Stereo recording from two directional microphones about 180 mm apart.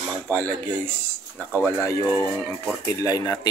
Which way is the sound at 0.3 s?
10° left (ahead or behind).